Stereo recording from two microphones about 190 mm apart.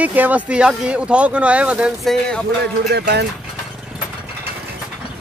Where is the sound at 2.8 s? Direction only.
60° right (ahead or behind).